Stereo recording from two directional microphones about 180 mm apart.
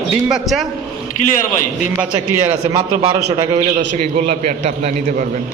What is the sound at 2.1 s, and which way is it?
A man's voice, 20° right (ahead or behind).